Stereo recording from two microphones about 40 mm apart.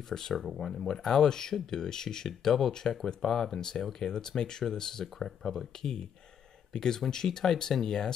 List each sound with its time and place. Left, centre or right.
0.3 s speech: centre